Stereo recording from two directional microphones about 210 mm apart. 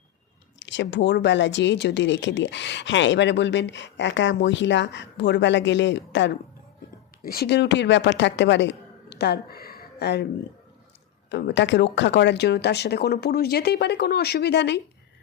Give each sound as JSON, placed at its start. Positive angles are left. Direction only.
{"t": 0.6, "sound": "speech", "side_deg": 60}
{"t": 7.2, "sound": "speech", "side_deg": 45}
{"t": 11.3, "sound": "speech", "side_deg": 55}